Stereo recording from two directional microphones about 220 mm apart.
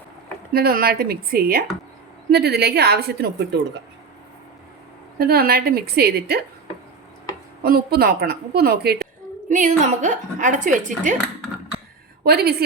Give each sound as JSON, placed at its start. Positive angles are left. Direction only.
{"t": 0.5, "sound": "a woman's voice", "side_deg": -45}
{"t": 5.2, "sound": "a woman's voice", "side_deg": -45}
{"t": 7.6, "sound": "a woman's voice", "side_deg": -45}
{"t": 9.5, "sound": "speech", "side_deg": -35}
{"t": 12.2, "sound": "a woman's voice", "side_deg": -45}